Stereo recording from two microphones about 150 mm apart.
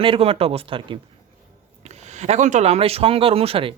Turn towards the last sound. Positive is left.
turn(degrees=-40)  # may be behind; listen again after turning